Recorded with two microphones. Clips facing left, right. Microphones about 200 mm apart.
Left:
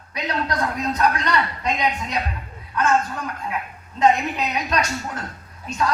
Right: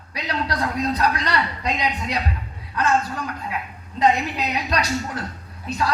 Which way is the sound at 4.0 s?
35° right (ahead or behind).